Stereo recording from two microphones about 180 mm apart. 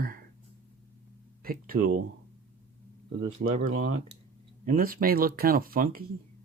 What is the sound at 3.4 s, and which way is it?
Speech, 75° right (ahead or behind).